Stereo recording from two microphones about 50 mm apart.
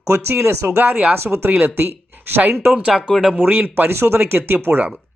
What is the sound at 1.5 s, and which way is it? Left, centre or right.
Speech, right.